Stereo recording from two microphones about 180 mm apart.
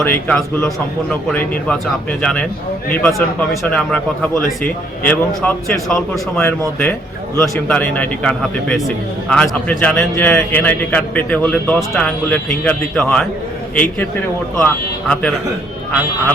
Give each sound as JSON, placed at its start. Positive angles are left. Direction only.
{"t": 0.0, "sound": "a man's voice", "side_deg": 10}
{"t": 14.6, "sound": "a man's voice", "side_deg": 5}